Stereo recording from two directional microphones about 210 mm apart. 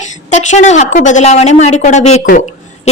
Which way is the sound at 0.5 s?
35° left (ahead or behind).